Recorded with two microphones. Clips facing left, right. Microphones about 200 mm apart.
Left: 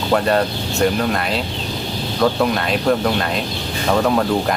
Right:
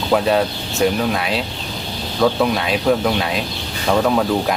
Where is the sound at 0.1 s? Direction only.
Centre (ahead or behind).